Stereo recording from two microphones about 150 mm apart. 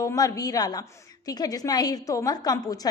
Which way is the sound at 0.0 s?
25° left (ahead or behind).